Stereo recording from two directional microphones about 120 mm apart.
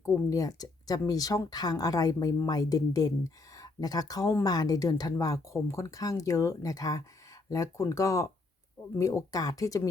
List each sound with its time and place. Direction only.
0.0 s speech: 25° left (ahead or behind)